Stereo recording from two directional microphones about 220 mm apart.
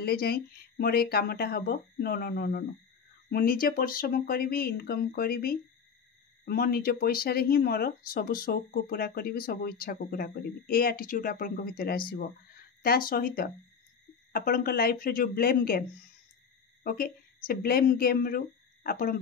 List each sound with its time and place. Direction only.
0.0 s speech: 45° left (ahead or behind)